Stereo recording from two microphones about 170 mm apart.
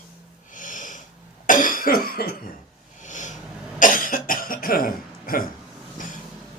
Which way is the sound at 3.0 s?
45° left (ahead or behind).